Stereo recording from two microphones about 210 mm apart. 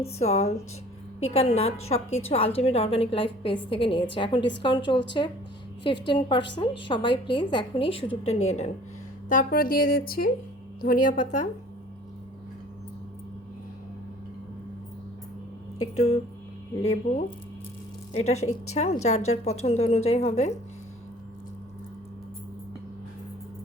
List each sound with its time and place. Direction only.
0.0 s a woman's voice: 30° left (ahead or behind)
2.0 s a woman's voice: 75° left (ahead or behind)
2.3 s a woman's voice: 30° left (ahead or behind)
9.3 s a woman's voice: 40° left (ahead or behind)
16.8 s a woman's voice: 30° left (ahead or behind)